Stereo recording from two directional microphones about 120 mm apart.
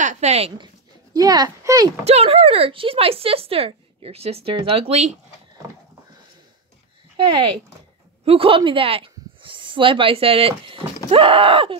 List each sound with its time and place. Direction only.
0.0 s speech: 80° right
1.1 s speech: 30° right (ahead or behind)
2.0 s speech: 60° right (ahead or behind)
7.2 s speech: 45° right (ahead or behind)